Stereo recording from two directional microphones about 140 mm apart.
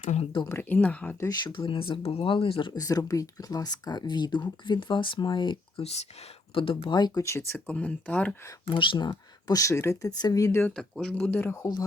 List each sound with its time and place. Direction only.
0.0 s speech: 55° left (ahead or behind)
0.4 s speech: 15° left (ahead or behind)
1.2 s speech: 30° left (ahead or behind)
5.8 s speech: 50° left (ahead or behind); by 8.4 s 10° left (ahead or behind)
8.6 s speech: 35° left (ahead or behind); by 10.7 s 20° left (ahead or behind)
10.8 s speech: 5° left (ahead or behind); by 11.9 s 25° left (ahead or behind)